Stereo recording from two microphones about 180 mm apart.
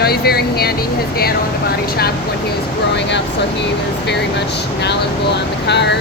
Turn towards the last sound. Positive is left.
turn(degrees=70)  # may be behind; listen again after turning